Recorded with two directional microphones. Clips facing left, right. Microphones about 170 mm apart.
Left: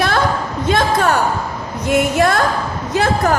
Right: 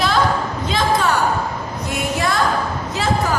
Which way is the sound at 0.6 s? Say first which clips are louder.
Left 4 dB; 55° left (ahead or behind).